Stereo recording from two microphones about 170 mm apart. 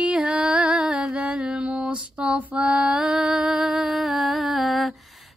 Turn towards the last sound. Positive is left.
turn(degrees=0)  # may be behind; listen again after turning